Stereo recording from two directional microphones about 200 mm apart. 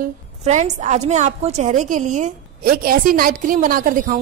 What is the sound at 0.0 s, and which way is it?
A woman's voice, 35° right (ahead or behind).